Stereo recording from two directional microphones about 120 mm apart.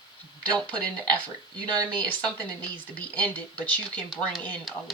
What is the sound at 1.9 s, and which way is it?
A woman's voice, 15° left (ahead or behind).